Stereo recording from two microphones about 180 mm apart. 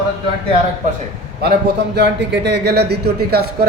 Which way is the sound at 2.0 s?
75° right (ahead or behind).